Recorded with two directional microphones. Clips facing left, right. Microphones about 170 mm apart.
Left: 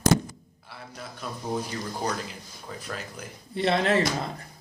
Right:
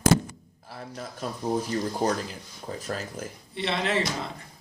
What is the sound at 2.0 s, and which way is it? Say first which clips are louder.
Speech: right 4 dB; 45° right (ahead or behind).